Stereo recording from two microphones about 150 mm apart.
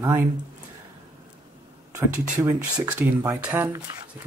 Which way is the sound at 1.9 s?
20° right (ahead or behind).